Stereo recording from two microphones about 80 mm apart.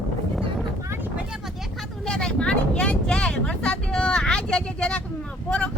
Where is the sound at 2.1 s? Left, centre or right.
Centre.